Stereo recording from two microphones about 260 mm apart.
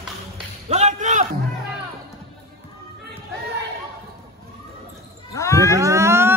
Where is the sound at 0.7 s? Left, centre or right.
Right.